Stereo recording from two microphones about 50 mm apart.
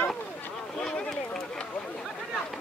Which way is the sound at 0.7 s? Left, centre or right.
Centre.